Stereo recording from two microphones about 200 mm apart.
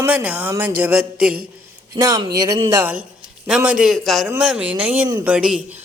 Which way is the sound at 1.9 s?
15° right (ahead or behind).